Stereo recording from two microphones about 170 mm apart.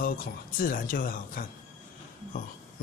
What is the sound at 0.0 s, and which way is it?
Speech, 55° left (ahead or behind).